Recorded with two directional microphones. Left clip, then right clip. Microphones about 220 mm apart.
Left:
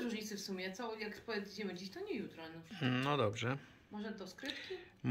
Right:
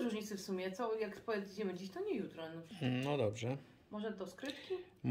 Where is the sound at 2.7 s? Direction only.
5° right (ahead or behind).